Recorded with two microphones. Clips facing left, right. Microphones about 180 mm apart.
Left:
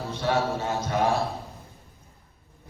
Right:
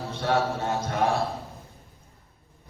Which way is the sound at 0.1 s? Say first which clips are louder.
Even; 60° right (ahead or behind).